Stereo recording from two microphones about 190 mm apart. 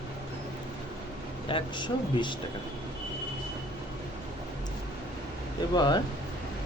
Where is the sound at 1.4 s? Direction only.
25° left (ahead or behind).